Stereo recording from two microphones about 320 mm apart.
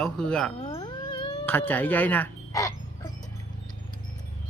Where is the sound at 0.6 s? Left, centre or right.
Centre.